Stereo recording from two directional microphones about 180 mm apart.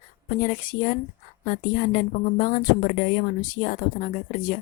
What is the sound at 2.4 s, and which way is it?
A woman's voice, 45° left (ahead or behind).